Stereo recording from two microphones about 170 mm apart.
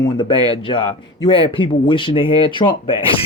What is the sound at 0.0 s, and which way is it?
Speech, 30° left (ahead or behind).